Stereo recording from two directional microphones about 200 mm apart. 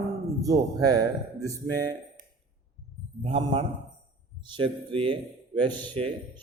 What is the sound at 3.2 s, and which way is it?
A man's voice, 30° right (ahead or behind).